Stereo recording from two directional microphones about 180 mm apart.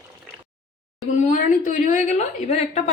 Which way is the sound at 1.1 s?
45° left (ahead or behind).